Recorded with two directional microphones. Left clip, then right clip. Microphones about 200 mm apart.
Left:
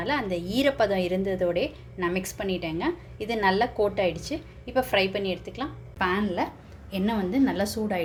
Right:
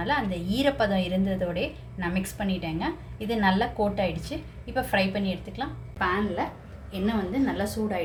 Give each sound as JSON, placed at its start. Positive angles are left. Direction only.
{"t": 0.1, "sound": "a woman's voice", "side_deg": 45}